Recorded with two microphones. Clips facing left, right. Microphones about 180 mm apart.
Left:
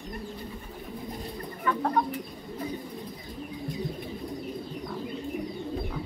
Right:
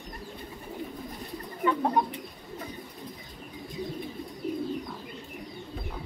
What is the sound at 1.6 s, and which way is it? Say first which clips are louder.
Bird: right 3 dB; 20° right (ahead or behind).